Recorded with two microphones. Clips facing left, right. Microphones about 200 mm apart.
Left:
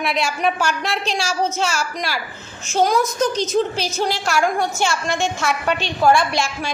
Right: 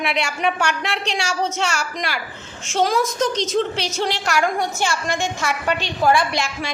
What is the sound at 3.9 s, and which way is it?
Speech, 75° right (ahead or behind).